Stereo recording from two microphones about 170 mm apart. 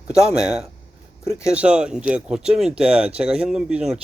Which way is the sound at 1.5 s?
5° right (ahead or behind).